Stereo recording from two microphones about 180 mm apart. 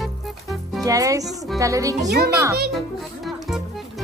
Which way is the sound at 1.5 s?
20° right (ahead or behind).